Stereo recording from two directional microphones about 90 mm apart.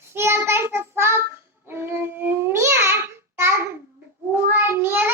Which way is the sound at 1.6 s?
25° right (ahead or behind).